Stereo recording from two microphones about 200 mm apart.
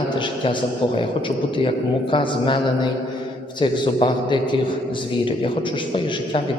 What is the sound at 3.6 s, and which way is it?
Speech, 25° left (ahead or behind).